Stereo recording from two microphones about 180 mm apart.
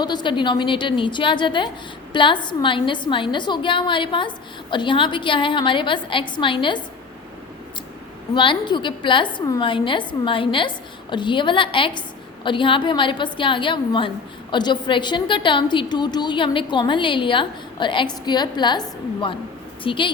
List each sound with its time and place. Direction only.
0.0 s a woman's voice: 25° left (ahead or behind)
8.4 s a woman's voice: 25° left (ahead or behind)